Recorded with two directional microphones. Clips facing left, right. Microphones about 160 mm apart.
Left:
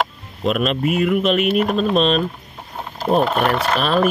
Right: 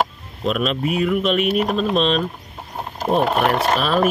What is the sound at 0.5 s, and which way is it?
Speech, 5° left (ahead or behind).